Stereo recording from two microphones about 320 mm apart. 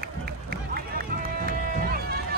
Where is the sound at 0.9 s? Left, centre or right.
Right.